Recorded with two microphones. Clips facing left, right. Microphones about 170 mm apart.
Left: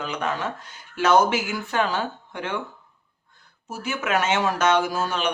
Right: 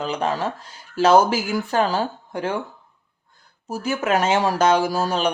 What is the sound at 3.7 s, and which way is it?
Speech, 35° right (ahead or behind).